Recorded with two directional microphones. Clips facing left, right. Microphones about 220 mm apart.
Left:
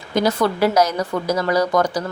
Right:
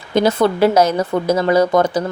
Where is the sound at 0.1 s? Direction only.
25° right (ahead or behind).